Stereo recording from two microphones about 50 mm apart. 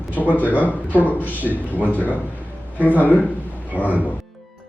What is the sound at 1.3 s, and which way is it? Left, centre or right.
Speech, right.